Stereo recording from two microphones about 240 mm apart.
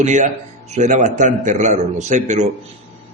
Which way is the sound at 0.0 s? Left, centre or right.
Right.